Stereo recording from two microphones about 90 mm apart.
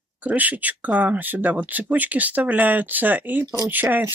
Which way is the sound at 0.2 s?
20° right (ahead or behind).